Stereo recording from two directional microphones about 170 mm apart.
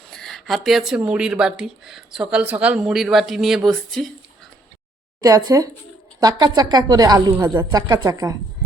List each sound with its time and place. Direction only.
0.1 s speech: centre (ahead or behind)
5.2 s a woman's voice: 20° right (ahead or behind)